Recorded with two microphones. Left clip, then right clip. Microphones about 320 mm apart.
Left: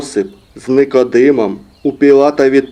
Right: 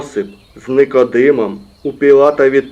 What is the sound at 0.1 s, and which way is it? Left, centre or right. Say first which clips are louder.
Speech: left 3 dB; left.